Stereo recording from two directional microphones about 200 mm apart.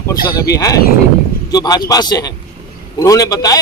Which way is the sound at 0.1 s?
20° left (ahead or behind).